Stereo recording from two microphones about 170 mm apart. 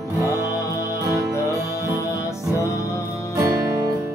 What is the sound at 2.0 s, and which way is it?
Music, 20° left (ahead or behind).